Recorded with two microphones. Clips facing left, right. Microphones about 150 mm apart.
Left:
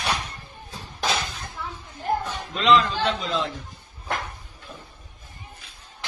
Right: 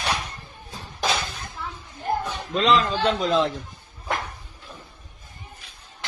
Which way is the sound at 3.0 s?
50° right (ahead or behind).